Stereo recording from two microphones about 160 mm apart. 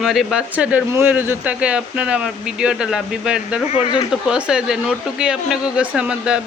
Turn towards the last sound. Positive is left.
turn(degrees=-5)  # may be behind; listen again after turning